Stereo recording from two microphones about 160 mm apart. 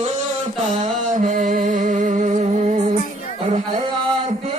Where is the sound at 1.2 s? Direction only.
55° right (ahead or behind).